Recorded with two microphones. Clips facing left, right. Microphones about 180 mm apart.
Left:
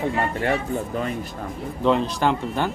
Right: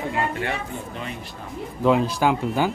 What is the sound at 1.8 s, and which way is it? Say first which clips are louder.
Speech: right 1 dB; 5° right (ahead or behind).